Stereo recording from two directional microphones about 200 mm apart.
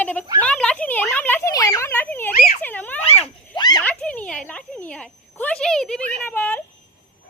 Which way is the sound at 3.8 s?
5° left (ahead or behind).